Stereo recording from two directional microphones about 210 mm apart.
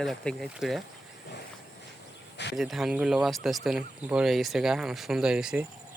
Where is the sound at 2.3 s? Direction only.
55° left (ahead or behind).